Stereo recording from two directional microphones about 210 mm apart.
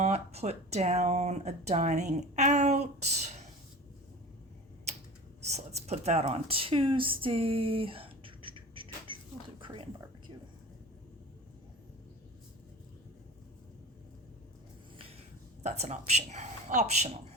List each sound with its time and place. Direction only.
0.0 s speech: 30° right (ahead or behind)
5.5 s speech: 30° right (ahead or behind)
9.6 s a sound: 25° right (ahead or behind)
15.6 s speech: 35° right (ahead or behind)